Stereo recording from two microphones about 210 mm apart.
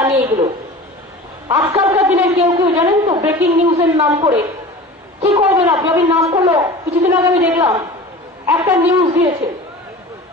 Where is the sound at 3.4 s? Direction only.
30° right (ahead or behind).